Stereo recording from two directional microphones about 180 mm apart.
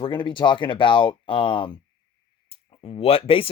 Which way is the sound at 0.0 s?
25° left (ahead or behind).